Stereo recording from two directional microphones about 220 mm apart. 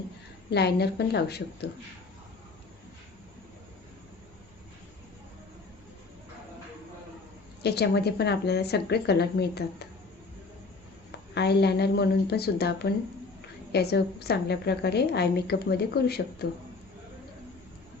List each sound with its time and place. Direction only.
0.5 s a woman's voice: 50° left (ahead or behind)
7.6 s a woman's voice: 50° left (ahead or behind)
11.3 s a woman's voice: 50° left (ahead or behind)